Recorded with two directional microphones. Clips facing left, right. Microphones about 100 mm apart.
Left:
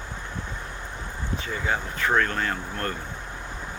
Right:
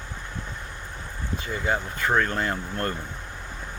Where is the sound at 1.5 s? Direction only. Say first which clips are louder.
Right 2 dB; 10° right (ahead or behind).